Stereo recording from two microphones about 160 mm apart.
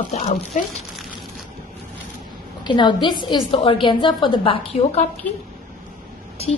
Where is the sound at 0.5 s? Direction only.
50° left (ahead or behind).